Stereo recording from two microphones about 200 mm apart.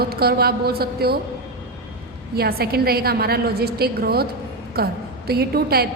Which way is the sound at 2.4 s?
50° right (ahead or behind).